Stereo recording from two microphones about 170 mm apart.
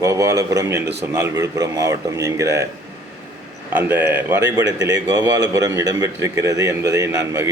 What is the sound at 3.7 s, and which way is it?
A man's voice, 10° right (ahead or behind).